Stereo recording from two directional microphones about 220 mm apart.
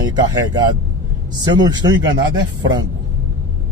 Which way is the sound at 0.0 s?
20° right (ahead or behind).